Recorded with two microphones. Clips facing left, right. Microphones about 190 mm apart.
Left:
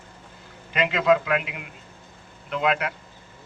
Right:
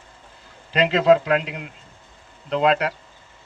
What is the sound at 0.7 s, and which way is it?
Speech, 35° right (ahead or behind).